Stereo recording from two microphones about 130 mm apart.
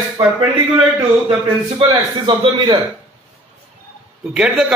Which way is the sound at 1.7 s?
45° right (ahead or behind).